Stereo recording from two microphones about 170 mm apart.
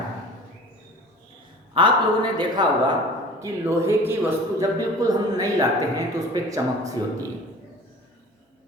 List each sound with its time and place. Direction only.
1.7 s speech: 30° right (ahead or behind)
3.4 s speech: 15° right (ahead or behind)